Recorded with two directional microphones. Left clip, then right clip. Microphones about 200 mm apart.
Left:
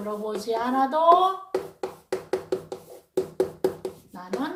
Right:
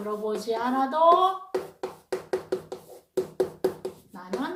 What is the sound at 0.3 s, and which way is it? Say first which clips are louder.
Speech: left 1 dB; 10° right (ahead or behind).